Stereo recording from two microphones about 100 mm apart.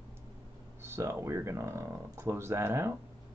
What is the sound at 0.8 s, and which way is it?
Speech, 25° right (ahead or behind).